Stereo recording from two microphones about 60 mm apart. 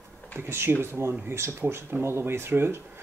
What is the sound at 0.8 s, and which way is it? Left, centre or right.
Speech, right.